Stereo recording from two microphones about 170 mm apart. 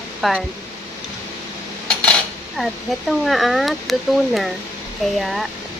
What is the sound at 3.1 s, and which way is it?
Speech, centre (ahead or behind).